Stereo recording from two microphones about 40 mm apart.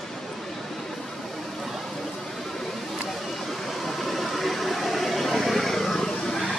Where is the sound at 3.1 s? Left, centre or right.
Centre.